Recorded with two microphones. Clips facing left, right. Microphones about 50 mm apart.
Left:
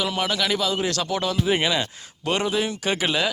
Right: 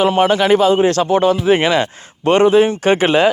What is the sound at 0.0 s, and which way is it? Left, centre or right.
Speech, right.